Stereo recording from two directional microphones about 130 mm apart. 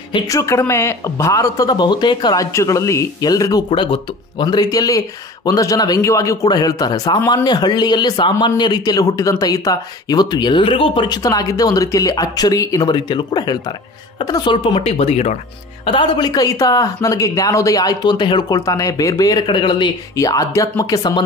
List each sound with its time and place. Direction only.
0.3 s a woman's voice: 25° left (ahead or behind)
3.7 s a woman's voice: 40° left (ahead or behind)
11.2 s a woman's voice: 30° left (ahead or behind); by 15.3 s 55° left (ahead or behind)
15.8 s a woman's voice: 40° left (ahead or behind)